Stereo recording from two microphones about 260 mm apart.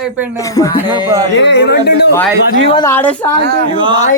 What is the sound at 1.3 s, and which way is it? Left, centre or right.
Speech, left.